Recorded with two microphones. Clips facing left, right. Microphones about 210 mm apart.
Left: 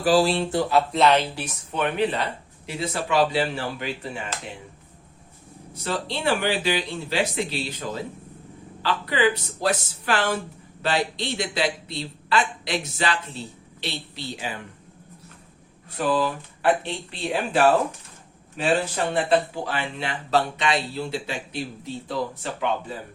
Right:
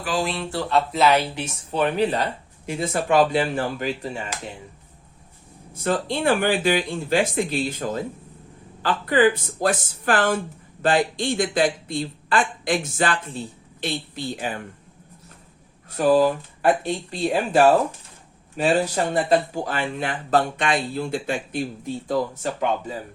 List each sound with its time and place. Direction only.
0.0 s speech: 35° left (ahead or behind)
0.7 s speech: centre (ahead or behind)
1.4 s speech: 25° right (ahead or behind)
5.7 s speech: 50° right (ahead or behind)
16.0 s speech: 40° right (ahead or behind)